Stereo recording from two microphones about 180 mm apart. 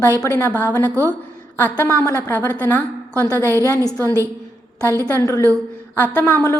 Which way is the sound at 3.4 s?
15° right (ahead or behind).